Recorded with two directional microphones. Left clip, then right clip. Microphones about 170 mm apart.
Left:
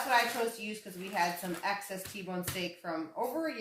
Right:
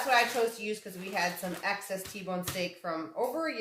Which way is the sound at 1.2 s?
30° right (ahead or behind).